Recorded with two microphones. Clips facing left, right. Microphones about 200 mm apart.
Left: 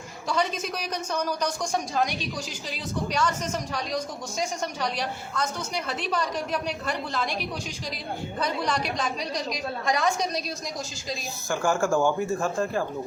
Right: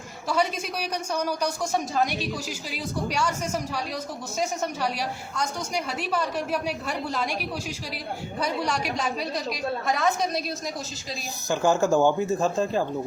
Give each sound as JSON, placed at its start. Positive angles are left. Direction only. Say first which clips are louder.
{"t": 0.3, "sound": "a man's voice", "louder": "right 1 dB", "side_deg": -10}
{"t": 8.4, "sound": "a man's voice", "louder": "right 1 dB", "side_deg": -10}
{"t": 11.4, "sound": "speech", "louder": "right 3 dB", "side_deg": -20}